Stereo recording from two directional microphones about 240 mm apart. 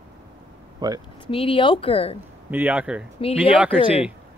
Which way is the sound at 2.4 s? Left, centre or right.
Centre.